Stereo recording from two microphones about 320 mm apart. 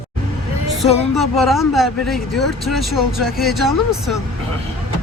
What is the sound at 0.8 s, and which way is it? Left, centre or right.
Speech, centre.